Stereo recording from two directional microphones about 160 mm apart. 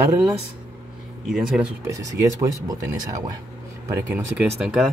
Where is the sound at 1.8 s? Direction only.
20° right (ahead or behind).